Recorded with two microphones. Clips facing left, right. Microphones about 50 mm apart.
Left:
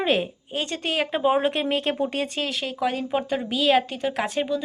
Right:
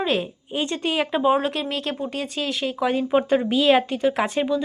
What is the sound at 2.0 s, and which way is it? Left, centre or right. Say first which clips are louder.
Speech: left 3 dB; left.